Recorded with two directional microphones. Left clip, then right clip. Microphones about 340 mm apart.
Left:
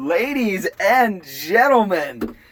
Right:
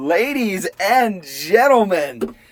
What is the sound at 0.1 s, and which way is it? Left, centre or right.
Speech, centre.